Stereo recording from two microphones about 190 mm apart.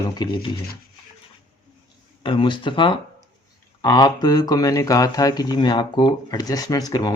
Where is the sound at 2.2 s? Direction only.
25° left (ahead or behind).